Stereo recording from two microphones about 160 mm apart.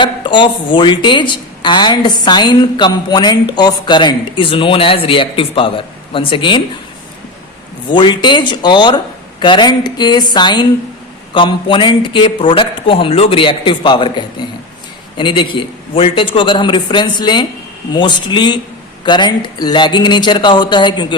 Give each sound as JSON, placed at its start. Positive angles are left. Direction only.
{"t": 0.0, "sound": "a woman's voice", "side_deg": 30}
{"t": 7.9, "sound": "a woman's voice", "side_deg": 30}